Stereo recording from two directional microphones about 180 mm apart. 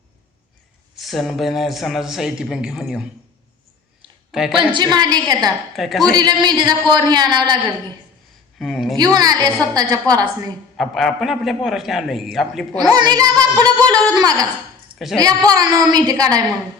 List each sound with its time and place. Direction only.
0.9 s a man's voice: centre (ahead or behind)
4.3 s speech: 5° right (ahead or behind)
4.7 s a woman's voice: 25° right (ahead or behind)
5.5 s a man's voice: centre (ahead or behind)
6.1 s a woman's voice: 20° right (ahead or behind)
8.5 s speech: centre (ahead or behind)
9.0 s a woman's voice: 20° right (ahead or behind)
10.8 s a man's voice: centre (ahead or behind)
12.9 s a woman's voice: 20° right (ahead or behind)
14.9 s a woman's voice: centre (ahead or behind)
15.4 s a woman's voice: 20° right (ahead or behind)